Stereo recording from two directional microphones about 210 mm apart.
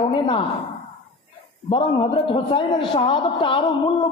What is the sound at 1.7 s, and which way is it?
A man's voice, 25° left (ahead or behind).